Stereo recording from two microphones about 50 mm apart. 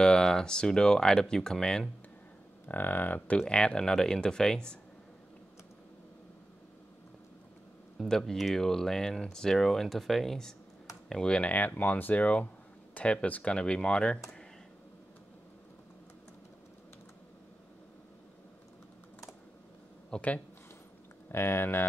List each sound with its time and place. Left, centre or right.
0.0 s speech: centre
2.7 s speech: left
3.2 s speech: left
8.0 s speech: centre
11.5 s speech: left
20.1 s speech: left
21.3 s speech: left